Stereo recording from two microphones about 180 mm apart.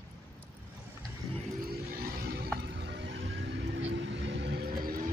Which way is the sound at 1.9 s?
60° right (ahead or behind).